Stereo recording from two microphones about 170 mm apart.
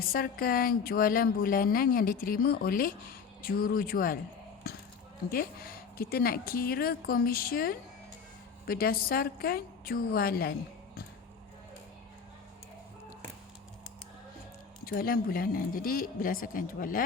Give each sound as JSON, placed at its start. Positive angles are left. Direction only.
{"t": 0.0, "sound": "a woman's voice", "side_deg": 60}
{"t": 5.3, "sound": "a woman's voice", "side_deg": 60}
{"t": 14.8, "sound": "a woman's voice", "side_deg": 60}